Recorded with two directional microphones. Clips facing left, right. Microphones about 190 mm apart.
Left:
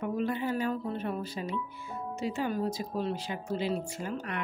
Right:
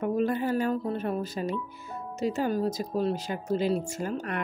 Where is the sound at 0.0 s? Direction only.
45° right (ahead or behind).